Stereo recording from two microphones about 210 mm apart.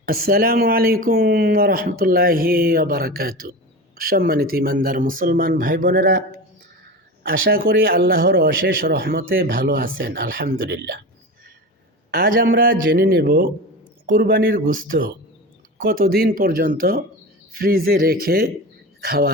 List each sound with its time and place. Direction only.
0.0 s speech: 45° right (ahead or behind)
7.2 s speech: 45° right (ahead or behind)
12.1 s speech: 45° right (ahead or behind)